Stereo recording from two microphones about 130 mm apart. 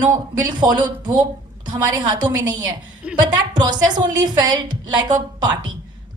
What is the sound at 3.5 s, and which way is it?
A woman's voice, 35° right (ahead or behind).